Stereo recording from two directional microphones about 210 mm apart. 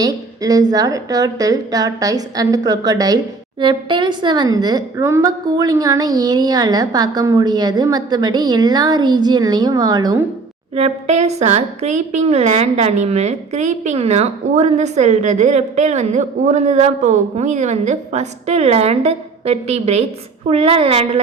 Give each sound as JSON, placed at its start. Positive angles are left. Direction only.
{"t": 0.0, "sound": "a woman's voice", "side_deg": -15}
{"t": 10.8, "sound": "a woman's voice", "side_deg": -30}